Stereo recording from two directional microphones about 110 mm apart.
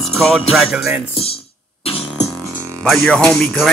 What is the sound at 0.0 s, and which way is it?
Music, centre (ahead or behind).